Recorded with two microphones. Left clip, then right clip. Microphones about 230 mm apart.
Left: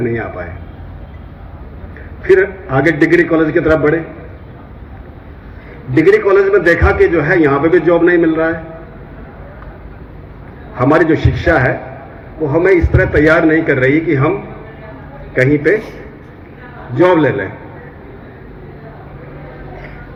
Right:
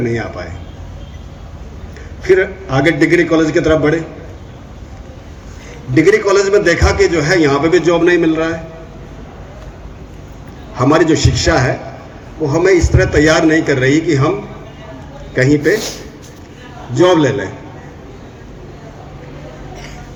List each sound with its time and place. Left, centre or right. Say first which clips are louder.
0.0 s a man's voice: left 1 dB; right
2.2 s a man's voice: left 2 dB; right
5.9 s a man's voice: left 1 dB; right
10.8 s a man's voice: even; right
15.4 s a man's voice: left 1 dB; right
16.9 s a man's voice: even; right